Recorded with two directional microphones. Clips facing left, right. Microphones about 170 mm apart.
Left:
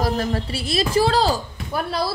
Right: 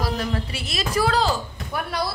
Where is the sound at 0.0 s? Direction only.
45° left (ahead or behind).